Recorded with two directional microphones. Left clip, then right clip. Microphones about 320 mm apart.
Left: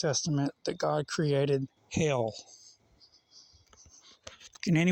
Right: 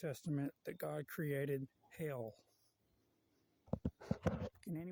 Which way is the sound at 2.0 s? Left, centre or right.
Right.